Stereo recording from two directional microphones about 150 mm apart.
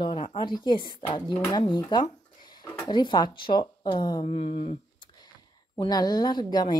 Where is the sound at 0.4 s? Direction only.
30° left (ahead or behind).